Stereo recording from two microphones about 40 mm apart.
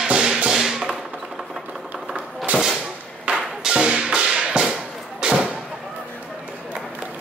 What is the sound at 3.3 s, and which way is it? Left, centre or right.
Music, right.